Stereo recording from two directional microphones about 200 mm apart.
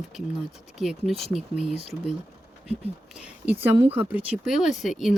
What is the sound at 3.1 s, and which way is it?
Speech, 10° right (ahead or behind).